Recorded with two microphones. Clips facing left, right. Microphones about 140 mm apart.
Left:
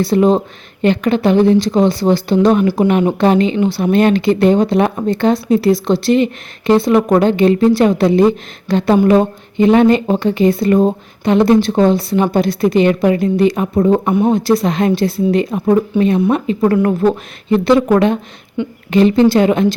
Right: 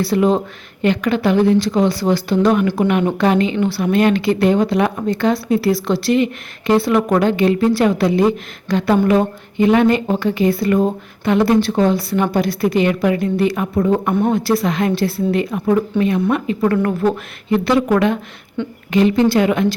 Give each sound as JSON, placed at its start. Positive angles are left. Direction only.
{"t": 0.0, "sound": "speech", "side_deg": 25}